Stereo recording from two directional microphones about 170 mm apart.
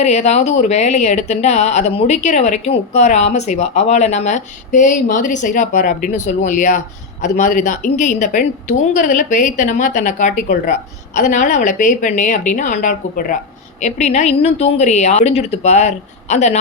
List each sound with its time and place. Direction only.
0.0 s speech: 40° left (ahead or behind)
13.8 s speech: 40° left (ahead or behind)